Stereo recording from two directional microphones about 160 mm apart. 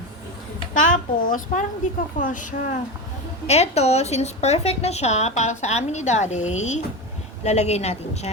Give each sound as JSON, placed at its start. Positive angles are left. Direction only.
{"t": 0.7, "sound": "a woman's voice", "side_deg": 55}
{"t": 3.4, "sound": "a woman's voice", "side_deg": 40}